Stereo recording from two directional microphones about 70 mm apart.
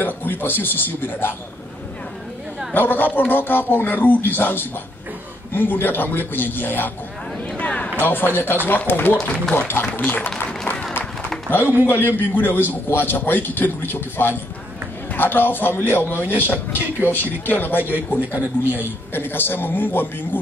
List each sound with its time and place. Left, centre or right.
0.0 s a man's voice: left
2.7 s a man's voice: left
7.5 s a sound: centre
8.0 s a man's voice: left
10.7 s a sound: left
11.8 s a man's voice: left